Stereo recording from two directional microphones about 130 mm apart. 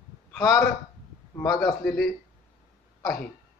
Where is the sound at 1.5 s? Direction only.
5° left (ahead or behind).